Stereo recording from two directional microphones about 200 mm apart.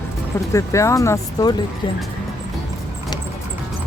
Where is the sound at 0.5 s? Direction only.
15° left (ahead or behind).